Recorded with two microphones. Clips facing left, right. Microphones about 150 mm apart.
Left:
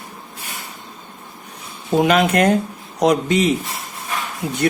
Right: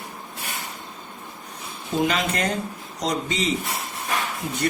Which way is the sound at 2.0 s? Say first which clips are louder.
Left 8 dB; 60° left (ahead or behind).